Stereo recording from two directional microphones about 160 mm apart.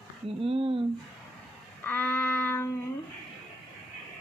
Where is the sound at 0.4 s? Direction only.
35° right (ahead or behind).